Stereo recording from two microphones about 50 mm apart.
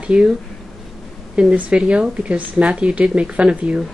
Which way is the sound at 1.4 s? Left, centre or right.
Centre.